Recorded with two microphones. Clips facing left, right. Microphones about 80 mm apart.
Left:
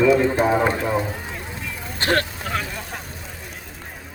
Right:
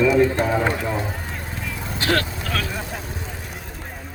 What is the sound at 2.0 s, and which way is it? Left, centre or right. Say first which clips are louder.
Speech: left 1 dB; left.